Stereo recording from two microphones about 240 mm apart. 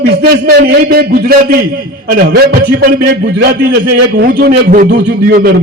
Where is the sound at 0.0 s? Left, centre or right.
Right.